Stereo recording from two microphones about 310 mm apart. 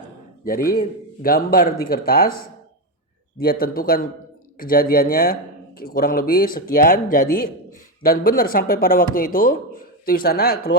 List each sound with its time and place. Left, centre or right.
0.4 s speech: left
3.4 s speech: left